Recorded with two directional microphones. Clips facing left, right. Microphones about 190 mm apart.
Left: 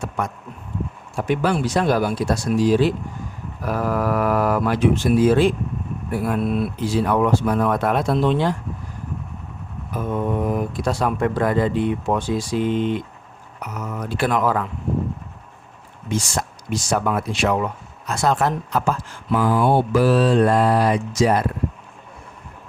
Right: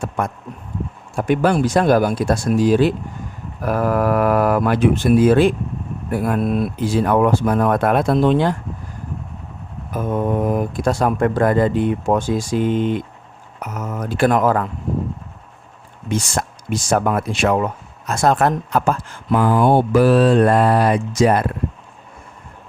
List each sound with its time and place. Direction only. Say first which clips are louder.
1.1 s speech: right 4 dB; 50° right (ahead or behind)
10.4 s speech: right 3 dB; 50° right (ahead or behind)
16.0 s speech: right 2 dB; 55° right (ahead or behind)